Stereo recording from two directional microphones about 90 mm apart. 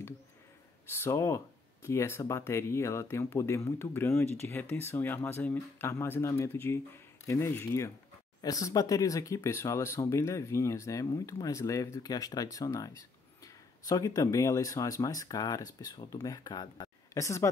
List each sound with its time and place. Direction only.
0.8 s speech: 30° left (ahead or behind)
8.4 s speech: 40° left (ahead or behind)
17.1 s speech: 35° left (ahead or behind)